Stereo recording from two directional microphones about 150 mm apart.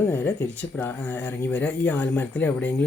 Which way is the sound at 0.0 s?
15° left (ahead or behind).